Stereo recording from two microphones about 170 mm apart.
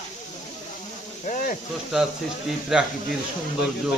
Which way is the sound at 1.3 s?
50° left (ahead or behind).